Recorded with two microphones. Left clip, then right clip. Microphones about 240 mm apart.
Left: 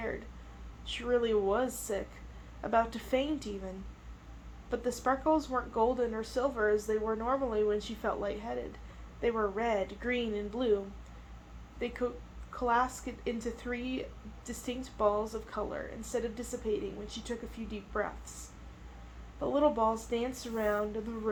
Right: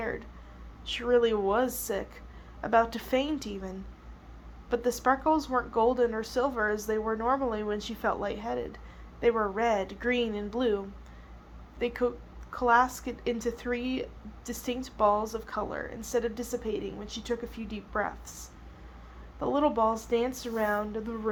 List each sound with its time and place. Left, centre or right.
0.9 s speech: right
11.8 s speech: right